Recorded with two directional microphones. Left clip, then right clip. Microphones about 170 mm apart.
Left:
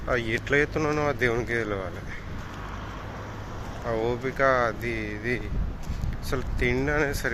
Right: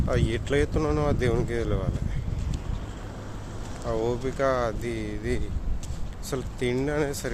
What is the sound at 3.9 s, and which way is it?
Speech, 25° right (ahead or behind).